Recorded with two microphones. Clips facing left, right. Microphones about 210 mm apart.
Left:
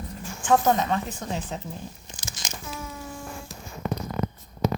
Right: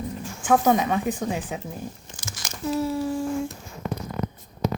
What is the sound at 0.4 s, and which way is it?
Speech, 10° right (ahead or behind).